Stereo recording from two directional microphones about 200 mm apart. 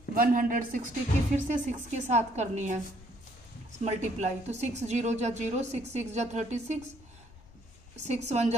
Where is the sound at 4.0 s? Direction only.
35° right (ahead or behind).